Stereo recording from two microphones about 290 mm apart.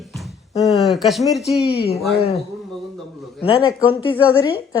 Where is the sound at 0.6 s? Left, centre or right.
Centre.